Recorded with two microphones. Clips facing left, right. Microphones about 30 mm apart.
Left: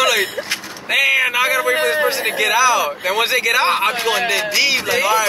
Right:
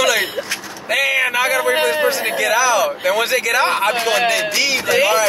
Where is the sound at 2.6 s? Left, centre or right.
Centre.